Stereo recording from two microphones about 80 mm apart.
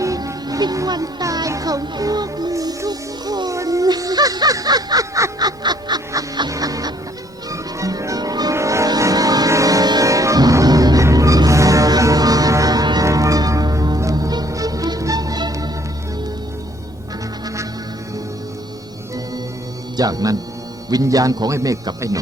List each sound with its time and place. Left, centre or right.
0.0 s music: right
3.5 s music: right
6.5 s music: right
8.5 s music: right
13.1 s music: right
20.0 s speech: right